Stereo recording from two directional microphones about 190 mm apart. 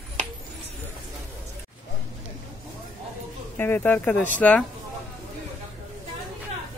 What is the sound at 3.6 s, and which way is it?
Speech, 10° left (ahead or behind).